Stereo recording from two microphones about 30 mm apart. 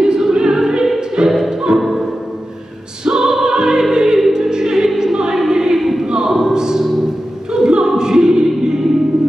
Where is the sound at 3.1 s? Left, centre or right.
Centre.